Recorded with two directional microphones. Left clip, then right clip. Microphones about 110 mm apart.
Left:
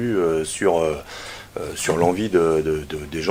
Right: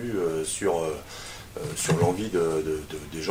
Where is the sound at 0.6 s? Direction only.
30° left (ahead or behind).